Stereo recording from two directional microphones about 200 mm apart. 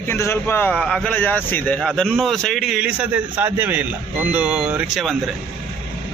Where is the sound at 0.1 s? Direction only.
10° left (ahead or behind); by 5.1 s 5° right (ahead or behind).